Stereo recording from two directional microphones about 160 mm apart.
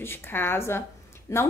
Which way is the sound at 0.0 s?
15° left (ahead or behind).